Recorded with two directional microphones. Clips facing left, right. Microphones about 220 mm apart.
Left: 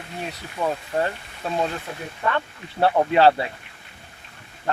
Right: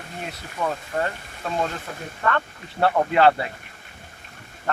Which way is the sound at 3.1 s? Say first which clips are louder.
Left 1 dB; 30° left (ahead or behind).